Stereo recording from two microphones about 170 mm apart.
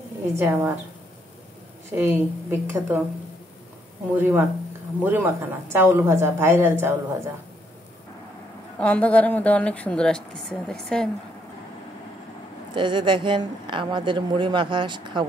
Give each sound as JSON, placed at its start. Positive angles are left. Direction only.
{"t": 0.4, "sound": "a woman's voice", "side_deg": -15}
{"t": 1.9, "sound": "a woman's voice", "side_deg": -15}
{"t": 4.1, "sound": "a woman's voice", "side_deg": -15}
{"t": 8.7, "sound": "a woman's voice", "side_deg": 10}
{"t": 12.7, "sound": "speech", "side_deg": -30}